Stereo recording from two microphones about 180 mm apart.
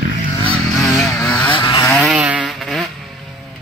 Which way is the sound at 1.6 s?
25° left (ahead or behind).